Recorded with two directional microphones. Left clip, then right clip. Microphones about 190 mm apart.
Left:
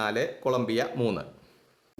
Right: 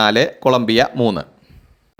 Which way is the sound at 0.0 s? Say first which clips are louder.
Right 13 dB; 35° right (ahead or behind).